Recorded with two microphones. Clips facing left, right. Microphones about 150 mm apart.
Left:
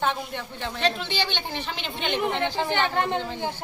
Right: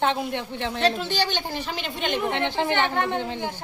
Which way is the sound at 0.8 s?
40° right (ahead or behind).